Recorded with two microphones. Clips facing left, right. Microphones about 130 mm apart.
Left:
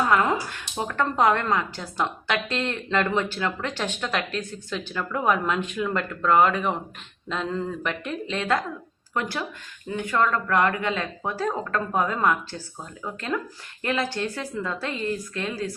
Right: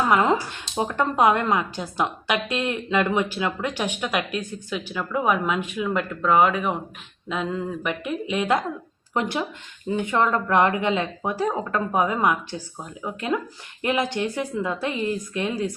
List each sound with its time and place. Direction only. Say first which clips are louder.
0.1 s speech: right 2 dB; 20° right (ahead or behind)